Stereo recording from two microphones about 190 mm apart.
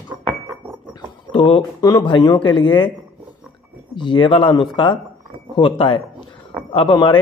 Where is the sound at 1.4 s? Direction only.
25° left (ahead or behind).